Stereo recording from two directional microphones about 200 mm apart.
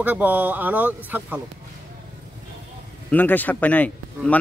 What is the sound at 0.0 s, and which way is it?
Speech, 10° right (ahead or behind).